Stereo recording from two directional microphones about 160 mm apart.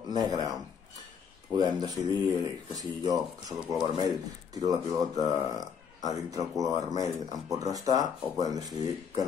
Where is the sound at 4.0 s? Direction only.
25° right (ahead or behind).